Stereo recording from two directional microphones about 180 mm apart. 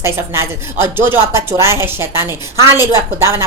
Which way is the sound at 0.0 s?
15° right (ahead or behind).